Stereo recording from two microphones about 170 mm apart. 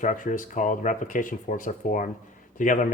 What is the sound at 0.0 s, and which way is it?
Speech, 50° left (ahead or behind).